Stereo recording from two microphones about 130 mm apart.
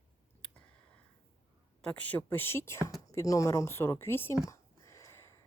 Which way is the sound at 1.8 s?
10° left (ahead or behind).